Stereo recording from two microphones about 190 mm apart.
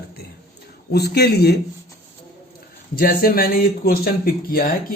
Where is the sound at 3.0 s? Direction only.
50° left (ahead or behind).